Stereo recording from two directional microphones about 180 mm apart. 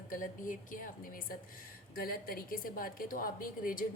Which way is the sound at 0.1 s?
45° left (ahead or behind).